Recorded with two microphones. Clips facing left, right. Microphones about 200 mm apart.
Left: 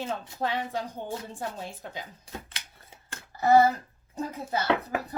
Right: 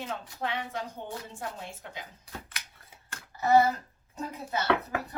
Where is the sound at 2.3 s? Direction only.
25° left (ahead or behind).